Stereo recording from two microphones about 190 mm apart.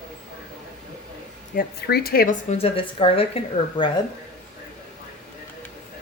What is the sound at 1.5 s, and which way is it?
A woman's voice, 55° left (ahead or behind).